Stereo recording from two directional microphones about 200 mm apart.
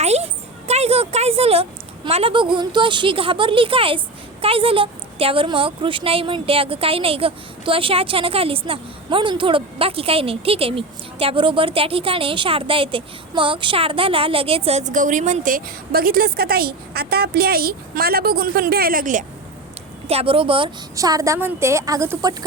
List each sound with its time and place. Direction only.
0.0 s a sound: 30° right (ahead or behind)
0.7 s a woman's voice: 30° right (ahead or behind)
20.1 s a woman's voice: 30° right (ahead or behind)